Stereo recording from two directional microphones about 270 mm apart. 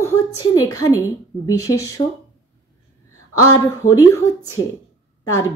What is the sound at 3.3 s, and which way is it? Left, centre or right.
Female singing, centre.